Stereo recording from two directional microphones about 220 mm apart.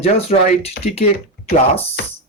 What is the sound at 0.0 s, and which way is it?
Speech, 25° left (ahead or behind).